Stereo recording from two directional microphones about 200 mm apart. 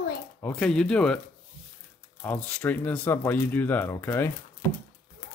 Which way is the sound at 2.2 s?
5° left (ahead or behind).